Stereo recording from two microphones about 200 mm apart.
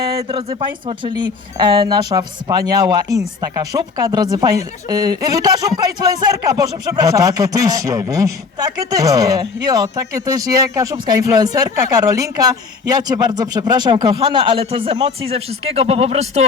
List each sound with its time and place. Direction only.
0.0 s speech: 25° right (ahead or behind)